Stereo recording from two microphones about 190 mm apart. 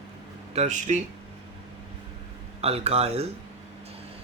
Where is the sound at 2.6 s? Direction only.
30° right (ahead or behind).